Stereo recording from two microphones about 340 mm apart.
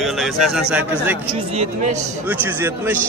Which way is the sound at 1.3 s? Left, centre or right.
Centre.